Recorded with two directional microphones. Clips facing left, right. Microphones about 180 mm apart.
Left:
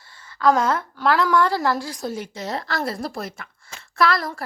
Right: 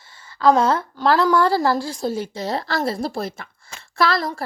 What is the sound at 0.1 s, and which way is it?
A woman's voice, 25° right (ahead or behind).